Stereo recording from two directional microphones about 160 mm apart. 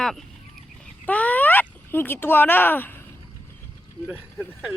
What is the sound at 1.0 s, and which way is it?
Speech, 10° left (ahead or behind).